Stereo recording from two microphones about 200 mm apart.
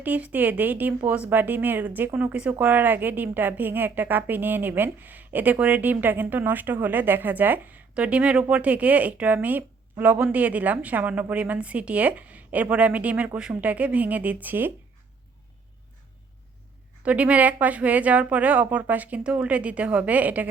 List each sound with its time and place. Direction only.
0.0 s speech: 10° right (ahead or behind)
17.0 s speech: 5° right (ahead or behind)